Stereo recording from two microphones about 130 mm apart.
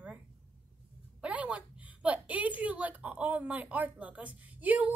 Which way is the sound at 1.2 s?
10° right (ahead or behind).